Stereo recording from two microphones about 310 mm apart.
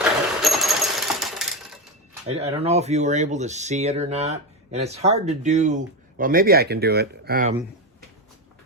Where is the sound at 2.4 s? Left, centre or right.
Centre.